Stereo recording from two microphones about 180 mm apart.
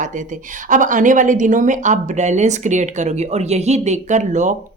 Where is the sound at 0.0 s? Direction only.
45° right (ahead or behind).